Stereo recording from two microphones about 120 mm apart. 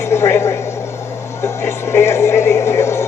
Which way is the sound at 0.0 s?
20° left (ahead or behind).